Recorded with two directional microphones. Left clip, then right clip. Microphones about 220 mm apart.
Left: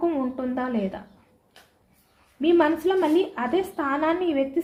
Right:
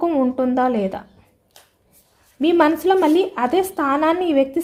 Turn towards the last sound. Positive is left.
turn(degrees=-50)  # may be behind; listen again after turning